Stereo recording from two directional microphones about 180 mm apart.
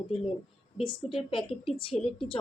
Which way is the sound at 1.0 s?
30° left (ahead or behind).